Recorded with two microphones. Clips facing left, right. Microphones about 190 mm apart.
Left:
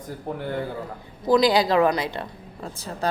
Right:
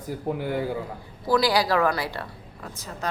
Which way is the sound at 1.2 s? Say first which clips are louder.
Left 3 dB; 20° left (ahead or behind).